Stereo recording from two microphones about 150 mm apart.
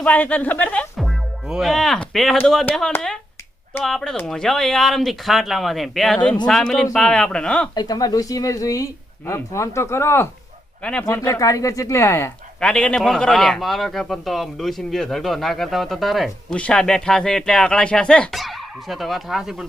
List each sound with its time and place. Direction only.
0.0 s speech: 10° left (ahead or behind)
0.9 s a man's voice: centre (ahead or behind)
7.8 s speech: 25° left (ahead or behind)
12.5 s a man's voice: 5° left (ahead or behind)